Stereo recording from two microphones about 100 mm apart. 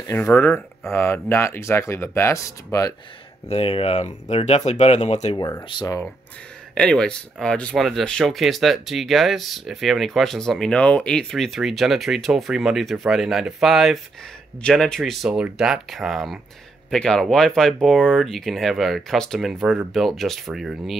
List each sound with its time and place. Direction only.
0.2 s speech: 20° left (ahead or behind)
3.4 s speech: 75° left (ahead or behind); by 5.4 s 90° left
6.7 s speech: 5° left (ahead or behind)